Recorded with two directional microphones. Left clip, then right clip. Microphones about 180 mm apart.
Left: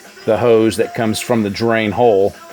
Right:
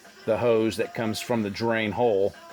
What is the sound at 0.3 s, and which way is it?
Speech, 20° left (ahead or behind).